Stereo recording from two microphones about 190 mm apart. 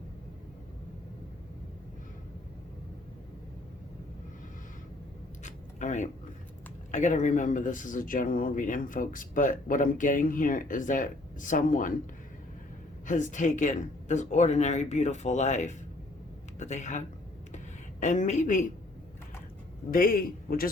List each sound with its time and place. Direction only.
5.4 s a sound: 40° left (ahead or behind)
6.9 s a man's voice: 40° left (ahead or behind)
13.1 s speech: 40° left (ahead or behind)
18.0 s speech: 40° left (ahead or behind)
19.9 s a man's voice: 50° left (ahead or behind)